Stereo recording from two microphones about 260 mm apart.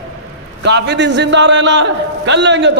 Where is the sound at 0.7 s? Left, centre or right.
Right.